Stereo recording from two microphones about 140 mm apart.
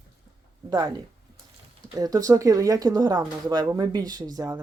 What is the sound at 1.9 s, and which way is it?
Speech, 25° right (ahead or behind).